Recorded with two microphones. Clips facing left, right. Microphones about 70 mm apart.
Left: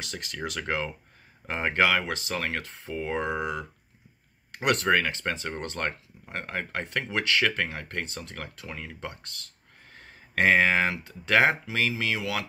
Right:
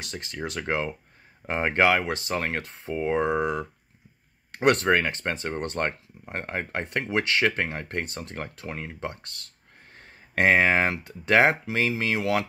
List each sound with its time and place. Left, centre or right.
0.0 s speech: right